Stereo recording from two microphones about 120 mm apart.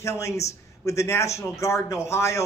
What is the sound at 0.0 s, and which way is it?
Speech, 25° left (ahead or behind).